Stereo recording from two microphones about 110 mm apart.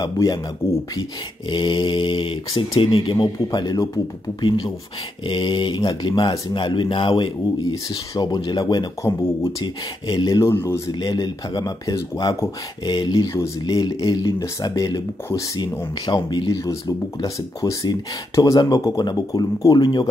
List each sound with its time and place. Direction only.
0.0 s speech: 40° left (ahead or behind)
1.5 s speech: 45° left (ahead or behind)
7.9 s speech: 35° left (ahead or behind)
9.0 s speech: 25° left (ahead or behind)
10.0 s speech: 40° left (ahead or behind)
10.4 s speech: 25° left (ahead or behind)
10.9 s speech: 40° left (ahead or behind)
15.6 s speech: 45° left (ahead or behind)